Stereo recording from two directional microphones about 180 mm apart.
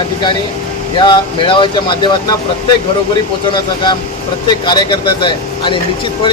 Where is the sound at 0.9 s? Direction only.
25° left (ahead or behind).